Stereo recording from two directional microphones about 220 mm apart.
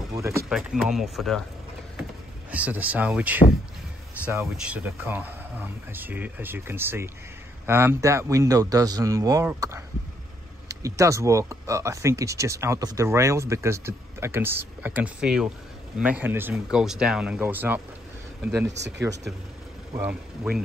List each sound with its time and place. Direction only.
0.1 s a sound: 15° right (ahead or behind)
0.5 s speech: 5° right (ahead or behind)
2.5 s speech: 5° right (ahead or behind)
18.8 s speech: 50° right (ahead or behind)
19.9 s speech: 5° right (ahead or behind)